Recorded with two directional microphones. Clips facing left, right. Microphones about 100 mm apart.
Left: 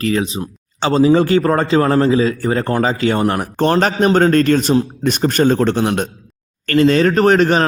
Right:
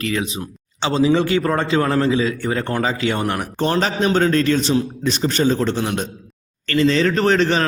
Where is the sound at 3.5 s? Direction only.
55° left (ahead or behind).